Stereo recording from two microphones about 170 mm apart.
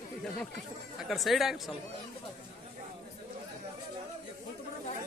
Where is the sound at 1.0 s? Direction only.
Centre (ahead or behind).